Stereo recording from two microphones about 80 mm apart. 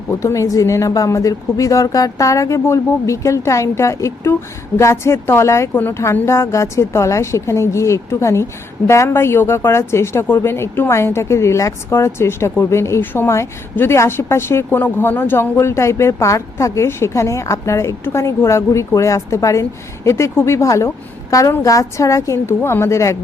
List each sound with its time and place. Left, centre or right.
0.1 s a woman's voice: left